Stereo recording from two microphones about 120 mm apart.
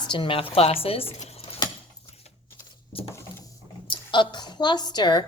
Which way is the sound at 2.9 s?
50° left (ahead or behind).